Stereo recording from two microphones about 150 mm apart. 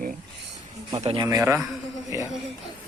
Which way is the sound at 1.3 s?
20° right (ahead or behind).